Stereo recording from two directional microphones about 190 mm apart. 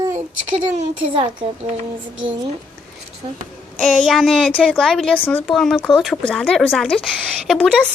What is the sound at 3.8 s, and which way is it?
A woman's voice, 5° left (ahead or behind).